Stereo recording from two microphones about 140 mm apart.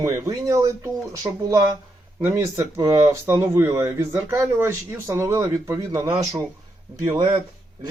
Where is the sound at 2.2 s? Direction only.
20° right (ahead or behind).